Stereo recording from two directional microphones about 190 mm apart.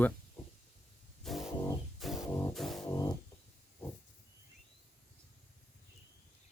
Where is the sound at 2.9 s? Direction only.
20° left (ahead or behind).